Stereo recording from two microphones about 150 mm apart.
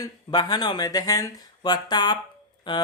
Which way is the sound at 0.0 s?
25° left (ahead or behind).